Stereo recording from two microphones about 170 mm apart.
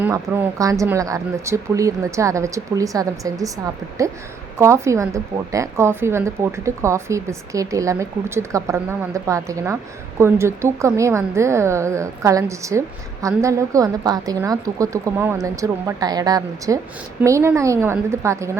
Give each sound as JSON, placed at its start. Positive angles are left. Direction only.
{"t": 0.3, "sound": "a woman's voice", "side_deg": -10}